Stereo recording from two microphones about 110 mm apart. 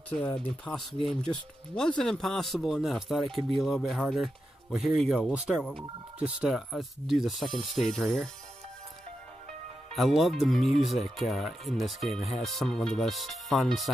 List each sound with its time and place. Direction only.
0.7 s speech: 25° left (ahead or behind)
1.0 s speech: 5° left (ahead or behind); by 6.5 s 10° right (ahead or behind)
6.5 s speech: centre (ahead or behind)
9.8 s speech: centre (ahead or behind)